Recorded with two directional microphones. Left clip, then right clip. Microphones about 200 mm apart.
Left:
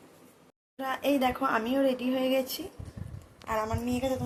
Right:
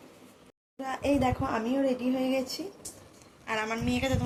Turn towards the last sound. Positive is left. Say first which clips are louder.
# right 1 dB
turn(degrees=15)  # may be behind; listen again after turning